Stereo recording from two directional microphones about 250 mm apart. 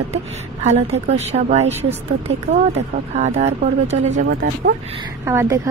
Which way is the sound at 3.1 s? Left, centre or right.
Right.